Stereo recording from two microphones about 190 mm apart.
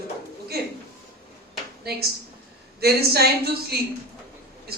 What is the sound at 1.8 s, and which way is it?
A man's voice, 55° right (ahead or behind).